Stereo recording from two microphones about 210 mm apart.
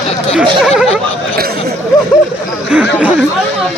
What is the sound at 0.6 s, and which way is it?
Speech, centre (ahead or behind).